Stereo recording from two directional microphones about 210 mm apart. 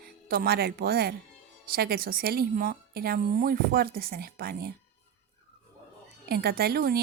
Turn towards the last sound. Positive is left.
turn(degrees=-45)  # may be behind; listen again after turning